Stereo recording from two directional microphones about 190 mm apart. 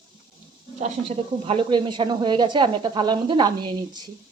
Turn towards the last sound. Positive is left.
turn(degrees=-20)  # may be behind; listen again after turning